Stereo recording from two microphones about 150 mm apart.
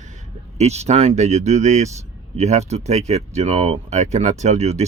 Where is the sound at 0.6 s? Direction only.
45° right (ahead or behind).